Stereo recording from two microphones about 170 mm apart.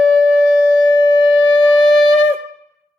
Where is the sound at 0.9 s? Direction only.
20° left (ahead or behind).